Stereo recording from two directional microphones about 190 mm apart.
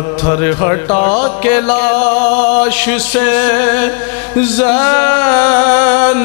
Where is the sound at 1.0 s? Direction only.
15° left (ahead or behind).